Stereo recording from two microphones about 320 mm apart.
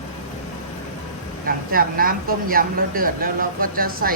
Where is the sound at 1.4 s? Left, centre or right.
Right.